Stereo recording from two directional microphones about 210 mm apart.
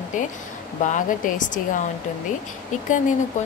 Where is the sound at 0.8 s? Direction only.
40° left (ahead or behind).